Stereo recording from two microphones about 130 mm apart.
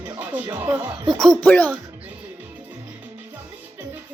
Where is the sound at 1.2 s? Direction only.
5° left (ahead or behind).